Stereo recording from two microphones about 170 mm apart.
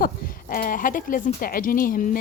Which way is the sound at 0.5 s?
55° left (ahead or behind).